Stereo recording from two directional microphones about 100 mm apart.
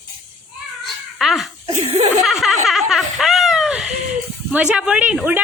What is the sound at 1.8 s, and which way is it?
Speech, 90° right.